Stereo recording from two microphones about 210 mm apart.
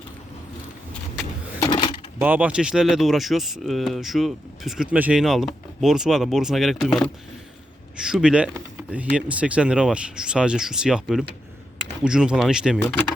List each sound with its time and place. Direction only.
1.5 s coin: 15° left (ahead or behind)
2.2 s speech: 5° right (ahead or behind)